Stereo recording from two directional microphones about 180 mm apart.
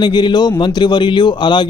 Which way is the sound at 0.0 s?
25° left (ahead or behind).